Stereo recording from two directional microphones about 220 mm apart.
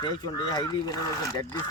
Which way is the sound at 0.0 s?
20° left (ahead or behind).